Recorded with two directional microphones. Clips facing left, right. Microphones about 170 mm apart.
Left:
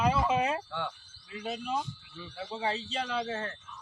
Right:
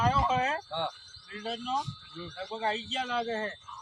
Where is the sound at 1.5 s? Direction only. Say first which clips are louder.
Even; 10° left (ahead or behind).